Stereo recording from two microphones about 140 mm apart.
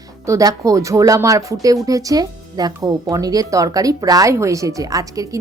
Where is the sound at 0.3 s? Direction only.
25° right (ahead or behind).